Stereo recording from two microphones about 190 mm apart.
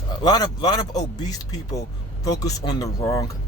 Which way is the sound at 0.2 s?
20° left (ahead or behind).